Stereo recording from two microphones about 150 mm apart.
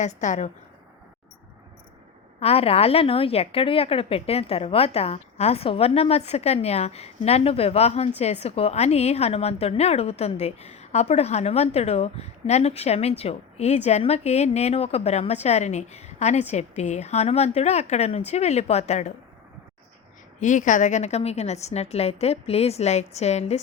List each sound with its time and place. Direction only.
0.0 s a woman's voice: 55° left (ahead or behind)
2.4 s a woman's voice: 40° left (ahead or behind)
20.4 s a woman's voice: 55° left (ahead or behind)